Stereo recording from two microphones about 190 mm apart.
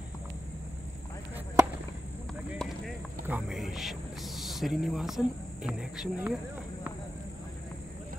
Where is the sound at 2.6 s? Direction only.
Centre (ahead or behind).